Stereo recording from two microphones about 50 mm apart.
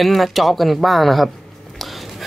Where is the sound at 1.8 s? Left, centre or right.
Centre.